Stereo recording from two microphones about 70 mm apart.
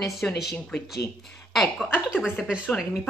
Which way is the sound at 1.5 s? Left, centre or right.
Centre.